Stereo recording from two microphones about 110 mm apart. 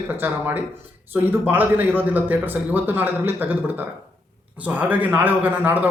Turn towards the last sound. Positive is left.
turn(degrees=-15)  # may be behind; listen again after turning